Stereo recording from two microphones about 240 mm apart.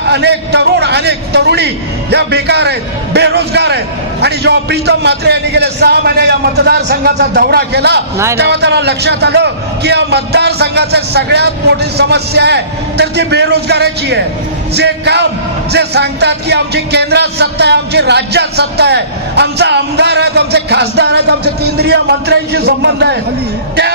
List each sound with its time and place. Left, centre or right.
0.0 s a man's voice: right